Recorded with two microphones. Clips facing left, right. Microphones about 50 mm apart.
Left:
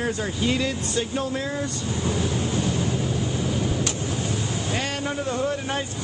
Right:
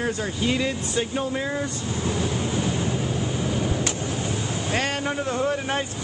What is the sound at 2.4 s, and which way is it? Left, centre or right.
Waves, centre.